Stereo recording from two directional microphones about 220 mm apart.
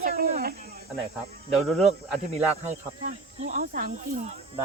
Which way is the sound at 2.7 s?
30° right (ahead or behind).